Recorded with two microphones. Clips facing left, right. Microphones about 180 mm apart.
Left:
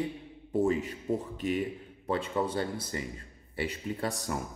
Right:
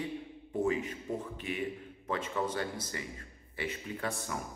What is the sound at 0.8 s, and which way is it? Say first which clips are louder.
A man's voice: left 5 dB; 35° left (ahead or behind).